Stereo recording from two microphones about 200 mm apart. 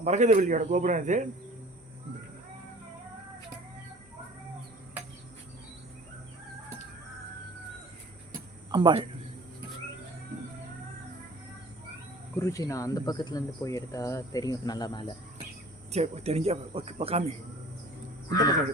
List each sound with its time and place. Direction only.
0.0 s speech: 35° right (ahead or behind)
8.7 s speech: 25° right (ahead or behind)
12.4 s speech: 15° left (ahead or behind)
15.9 s speech: 30° right (ahead or behind)
18.3 s speech: 20° left (ahead or behind)